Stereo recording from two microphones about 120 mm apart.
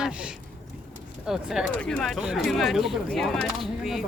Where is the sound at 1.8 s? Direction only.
10° left (ahead or behind).